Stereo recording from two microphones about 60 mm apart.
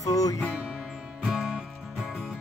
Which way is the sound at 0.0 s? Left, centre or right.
Left.